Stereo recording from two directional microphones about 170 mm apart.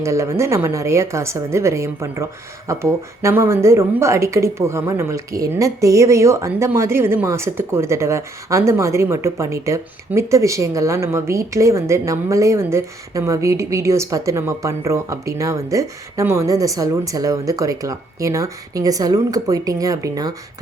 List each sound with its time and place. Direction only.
0.0 s a woman's voice: 15° right (ahead or behind)